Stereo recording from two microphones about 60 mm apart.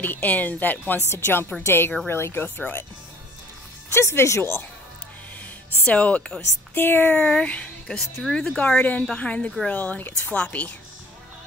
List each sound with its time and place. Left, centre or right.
0.0 s speech: left
2.4 s speech: left
3.9 s speech: left
5.9 s speech: left
6.7 s speech: left
7.2 s speech: centre